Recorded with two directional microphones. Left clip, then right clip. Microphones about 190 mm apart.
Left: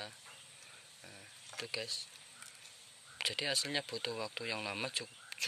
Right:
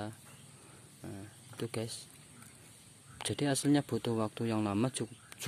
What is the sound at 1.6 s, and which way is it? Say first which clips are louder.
Speech: even; 10° right (ahead or behind).